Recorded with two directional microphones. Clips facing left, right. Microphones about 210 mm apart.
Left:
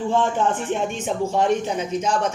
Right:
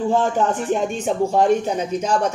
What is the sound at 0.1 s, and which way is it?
A man's voice, 40° right (ahead or behind).